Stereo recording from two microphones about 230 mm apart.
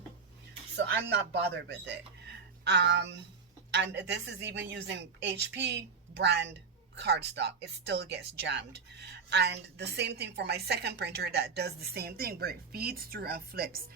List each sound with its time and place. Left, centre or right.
0.8 s a woman's voice: right